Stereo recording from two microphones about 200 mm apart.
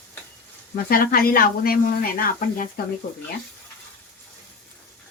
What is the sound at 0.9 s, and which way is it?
Speech, 50° left (ahead or behind).